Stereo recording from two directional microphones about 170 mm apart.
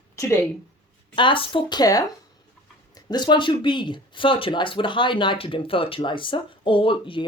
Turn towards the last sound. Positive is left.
turn(degrees=30)  # may be behind; listen again after turning